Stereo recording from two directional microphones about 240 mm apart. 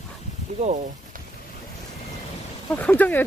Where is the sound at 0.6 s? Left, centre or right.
Right.